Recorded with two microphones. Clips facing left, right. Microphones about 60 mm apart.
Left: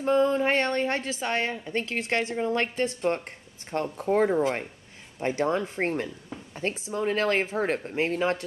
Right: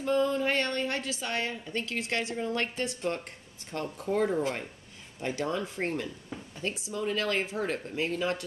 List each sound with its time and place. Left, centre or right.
0.0 s a woman's voice: left
4.4 s speech: left
5.2 s a woman's voice: left